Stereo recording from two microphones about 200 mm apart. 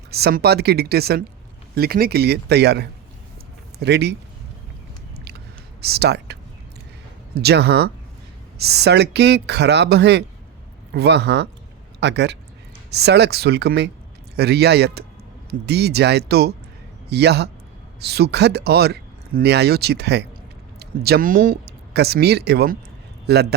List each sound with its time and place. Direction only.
0.1 s speech: 55° right (ahead or behind)
5.8 s speech: 55° right (ahead or behind)
7.3 s a man's voice: 55° right (ahead or behind)